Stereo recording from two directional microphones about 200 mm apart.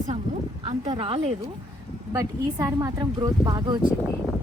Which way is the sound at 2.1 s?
15° right (ahead or behind).